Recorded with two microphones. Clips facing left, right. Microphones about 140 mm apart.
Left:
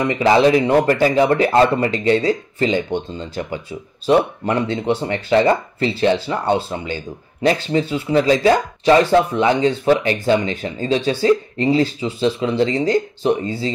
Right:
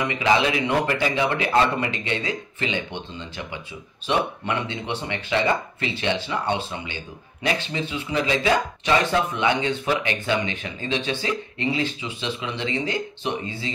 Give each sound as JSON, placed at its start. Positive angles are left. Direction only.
{"t": 0.0, "sound": "a man's voice", "side_deg": 40}